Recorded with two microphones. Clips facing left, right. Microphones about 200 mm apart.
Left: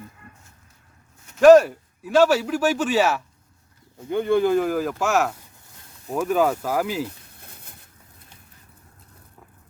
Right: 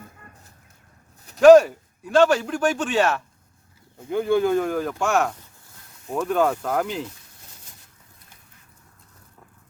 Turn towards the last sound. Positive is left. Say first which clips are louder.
# left 4 dB
turn(degrees=60)  # may be behind; listen again after turning